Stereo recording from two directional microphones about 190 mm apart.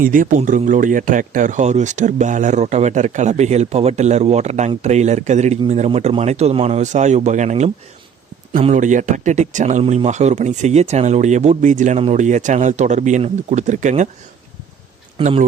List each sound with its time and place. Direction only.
0.0 s speech: 45° right (ahead or behind)
15.2 s speech: 40° right (ahead or behind)